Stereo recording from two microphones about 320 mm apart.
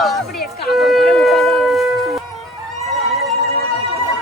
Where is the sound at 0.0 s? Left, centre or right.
Centre.